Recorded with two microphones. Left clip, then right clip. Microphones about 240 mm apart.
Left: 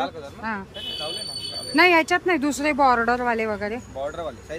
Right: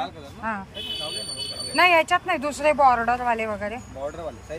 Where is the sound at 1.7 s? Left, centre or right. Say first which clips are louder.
Left 1 dB; centre.